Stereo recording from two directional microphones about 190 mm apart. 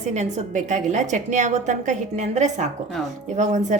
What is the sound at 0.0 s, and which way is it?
A woman's voice, 40° right (ahead or behind).